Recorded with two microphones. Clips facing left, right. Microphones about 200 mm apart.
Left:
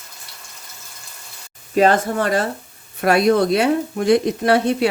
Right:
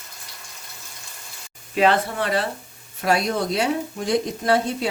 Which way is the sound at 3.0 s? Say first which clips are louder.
Left 7 dB; 60° left (ahead or behind).